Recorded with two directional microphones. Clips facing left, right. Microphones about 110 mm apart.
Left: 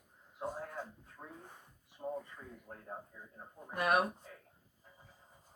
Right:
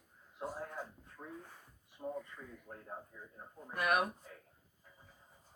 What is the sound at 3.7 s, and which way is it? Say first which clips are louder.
Speech: left 2 dB; 25° left (ahead or behind).